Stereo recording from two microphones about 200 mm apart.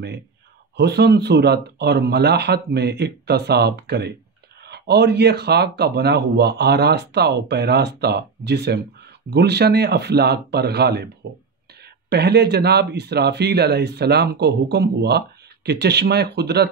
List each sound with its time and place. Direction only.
0.7 s speech: 55° right (ahead or behind)